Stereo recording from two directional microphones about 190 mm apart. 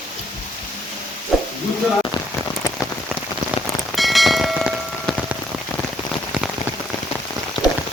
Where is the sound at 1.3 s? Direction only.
Centre (ahead or behind).